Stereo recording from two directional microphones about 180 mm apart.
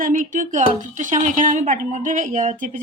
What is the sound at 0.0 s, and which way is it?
A woman's voice, 45° right (ahead or behind).